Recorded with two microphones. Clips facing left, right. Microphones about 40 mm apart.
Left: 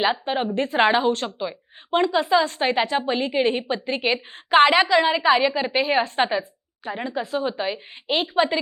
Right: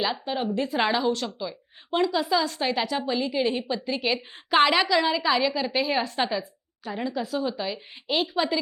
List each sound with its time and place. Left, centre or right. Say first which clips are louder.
0.0 s a woman's voice: left 5 dB; left